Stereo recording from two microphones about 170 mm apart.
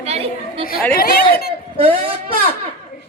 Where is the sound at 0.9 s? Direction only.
60° left (ahead or behind).